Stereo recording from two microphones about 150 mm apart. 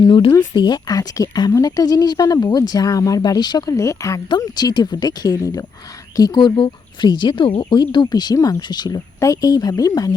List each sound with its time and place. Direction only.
0.0 s speech: 30° left (ahead or behind)